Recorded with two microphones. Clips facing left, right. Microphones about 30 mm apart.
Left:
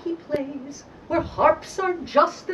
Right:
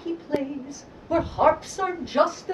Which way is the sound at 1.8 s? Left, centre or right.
Centre.